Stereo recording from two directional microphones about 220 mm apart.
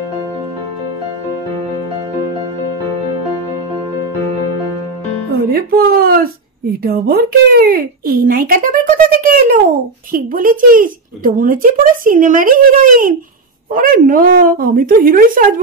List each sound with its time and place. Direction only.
5.5 s speech: 40° right (ahead or behind)